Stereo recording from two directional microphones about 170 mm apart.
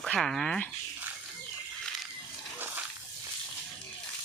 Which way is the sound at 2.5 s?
10° right (ahead or behind).